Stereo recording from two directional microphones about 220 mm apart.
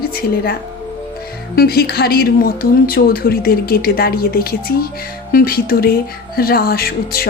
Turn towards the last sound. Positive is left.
turn(degrees=45)  # may be behind; listen again after turning